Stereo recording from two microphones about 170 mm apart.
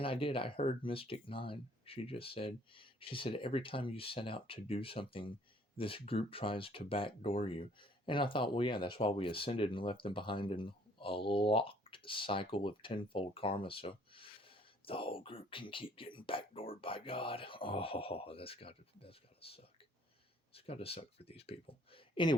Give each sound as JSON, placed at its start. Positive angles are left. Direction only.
{"t": 0.0, "sound": "speech", "side_deg": 30}